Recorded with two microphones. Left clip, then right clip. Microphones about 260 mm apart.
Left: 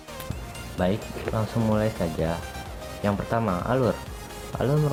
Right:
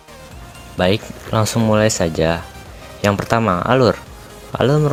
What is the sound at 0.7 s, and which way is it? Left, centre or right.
Speech, right.